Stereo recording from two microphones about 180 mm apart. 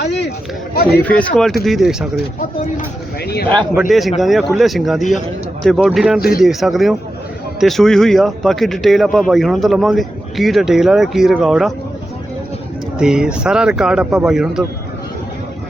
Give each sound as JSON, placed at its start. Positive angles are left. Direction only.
{"t": 0.0, "sound": "chatter", "side_deg": 70}
{"t": 1.0, "sound": "a man's voice", "side_deg": 10}
{"t": 3.8, "sound": "a man's voice", "side_deg": 0}
{"t": 6.1, "sound": "speech", "side_deg": 55}
{"t": 6.4, "sound": "a man's voice", "side_deg": 0}
{"t": 13.0, "sound": "a man's voice", "side_deg": -5}